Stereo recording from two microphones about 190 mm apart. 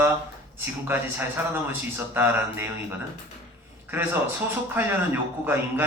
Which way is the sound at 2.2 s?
10° right (ahead or behind).